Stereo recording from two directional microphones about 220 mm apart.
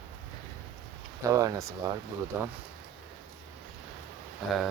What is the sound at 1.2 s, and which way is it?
Speech, 15° right (ahead or behind).